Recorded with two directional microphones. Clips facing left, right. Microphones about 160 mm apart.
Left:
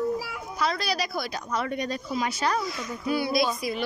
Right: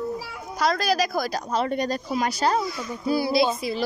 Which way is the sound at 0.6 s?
45° right (ahead or behind).